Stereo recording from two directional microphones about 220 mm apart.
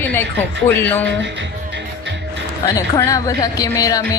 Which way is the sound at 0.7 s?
10° left (ahead or behind).